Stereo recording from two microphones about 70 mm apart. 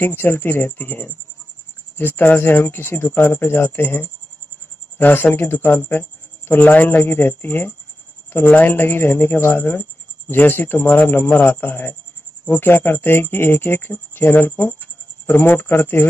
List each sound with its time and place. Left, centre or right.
0.0 s speech: left